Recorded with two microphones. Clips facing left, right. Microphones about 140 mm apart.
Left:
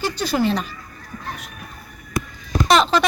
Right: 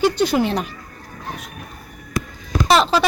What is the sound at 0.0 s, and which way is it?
Speech, 20° right (ahead or behind).